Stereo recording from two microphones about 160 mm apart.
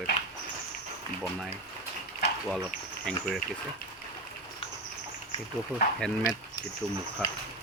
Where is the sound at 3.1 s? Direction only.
5° left (ahead or behind).